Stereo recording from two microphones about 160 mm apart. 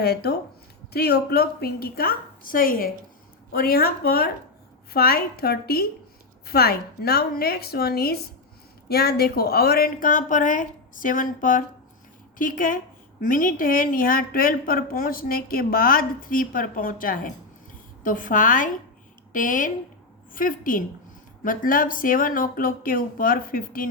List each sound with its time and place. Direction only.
0.0 s a woman's voice: 80° left; by 23.9 s 65° left (ahead or behind)